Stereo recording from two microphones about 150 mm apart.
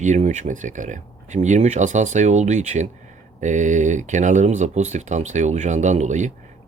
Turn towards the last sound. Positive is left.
turn(degrees=-50)  # may be behind; listen again after turning